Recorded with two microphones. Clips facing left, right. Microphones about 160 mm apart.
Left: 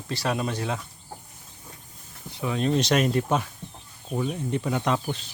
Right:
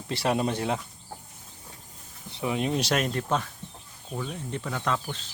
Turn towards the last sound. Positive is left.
turn(degrees=15)  # may be behind; listen again after turning